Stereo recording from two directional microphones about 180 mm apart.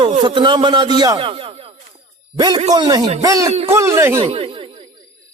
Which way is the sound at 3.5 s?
35° right (ahead or behind).